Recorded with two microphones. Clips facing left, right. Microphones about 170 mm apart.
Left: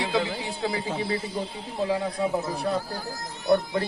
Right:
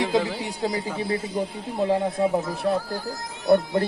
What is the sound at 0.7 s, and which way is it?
Speech, 25° left (ahead or behind).